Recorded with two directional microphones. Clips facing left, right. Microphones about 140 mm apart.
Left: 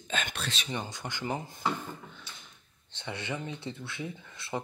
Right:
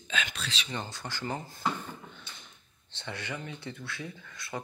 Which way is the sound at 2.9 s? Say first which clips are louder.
Left 2 dB; 15° left (ahead or behind).